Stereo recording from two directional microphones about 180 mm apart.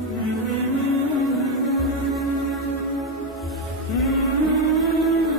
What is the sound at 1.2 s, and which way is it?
Music, centre (ahead or behind).